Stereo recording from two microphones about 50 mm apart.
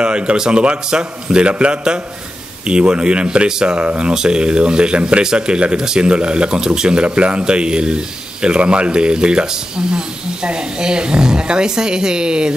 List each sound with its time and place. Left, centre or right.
0.0 s a man's voice: centre